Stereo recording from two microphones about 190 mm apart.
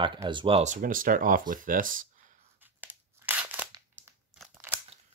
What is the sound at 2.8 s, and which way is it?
Crushing, 10° right (ahead or behind).